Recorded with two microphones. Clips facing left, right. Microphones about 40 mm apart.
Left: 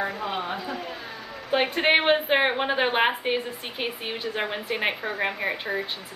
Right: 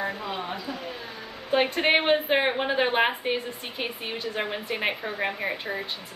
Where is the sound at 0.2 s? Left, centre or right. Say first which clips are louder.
Left 3 dB; left.